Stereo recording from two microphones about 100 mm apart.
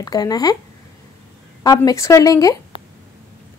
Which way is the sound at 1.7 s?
35° left (ahead or behind).